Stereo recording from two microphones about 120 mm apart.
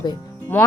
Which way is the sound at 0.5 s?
15° left (ahead or behind).